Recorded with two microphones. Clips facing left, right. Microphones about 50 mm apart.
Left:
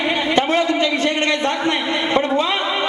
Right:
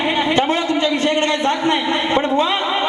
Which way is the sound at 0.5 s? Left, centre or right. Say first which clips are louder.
Left 2 dB; left.